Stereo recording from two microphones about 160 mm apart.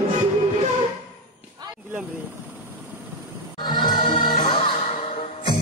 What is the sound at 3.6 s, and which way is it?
Music, 30° left (ahead or behind).